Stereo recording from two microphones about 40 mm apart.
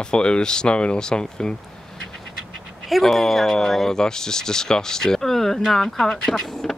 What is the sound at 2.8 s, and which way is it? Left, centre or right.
Speech, centre.